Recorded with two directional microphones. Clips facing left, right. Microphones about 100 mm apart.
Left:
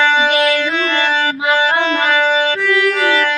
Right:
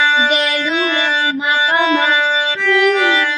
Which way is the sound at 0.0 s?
15° right (ahead or behind).